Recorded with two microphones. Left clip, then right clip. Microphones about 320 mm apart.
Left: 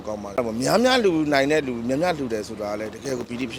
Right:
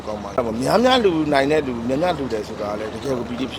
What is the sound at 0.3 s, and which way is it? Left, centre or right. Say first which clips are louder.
A man's voice: right 3 dB; left.